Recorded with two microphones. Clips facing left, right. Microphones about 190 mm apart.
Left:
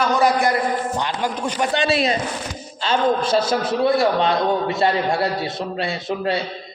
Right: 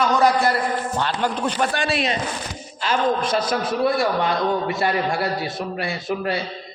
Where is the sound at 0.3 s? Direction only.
15° left (ahead or behind).